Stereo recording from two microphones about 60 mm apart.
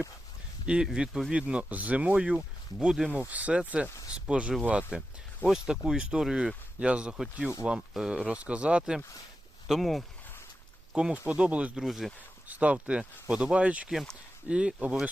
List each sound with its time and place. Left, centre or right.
0.6 s speech: centre
3.1 s speech: right
5.5 s speech: centre
8.3 s speech: right
9.6 s speech: centre
10.9 s speech: centre
11.8 s speech: centre
12.5 s speech: right